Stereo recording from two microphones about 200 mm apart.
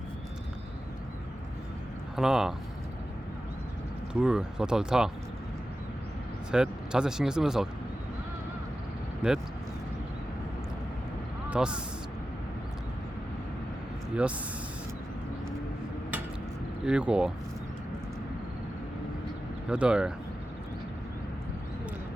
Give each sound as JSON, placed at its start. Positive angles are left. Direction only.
{"t": 2.1, "sound": "speech", "side_deg": 0}
{"t": 4.1, "sound": "speech", "side_deg": -5}
{"t": 6.5, "sound": "speech", "side_deg": -5}
{"t": 9.2, "sound": "speech", "side_deg": -5}
{"t": 11.4, "sound": "speech", "side_deg": -5}
{"t": 16.8, "sound": "speech", "side_deg": -5}
{"t": 19.6, "sound": "speech", "side_deg": -5}